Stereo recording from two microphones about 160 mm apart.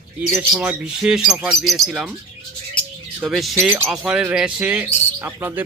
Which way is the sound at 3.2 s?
Centre (ahead or behind).